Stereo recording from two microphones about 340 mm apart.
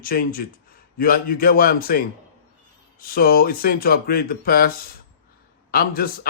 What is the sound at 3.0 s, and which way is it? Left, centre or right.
A man's voice, left.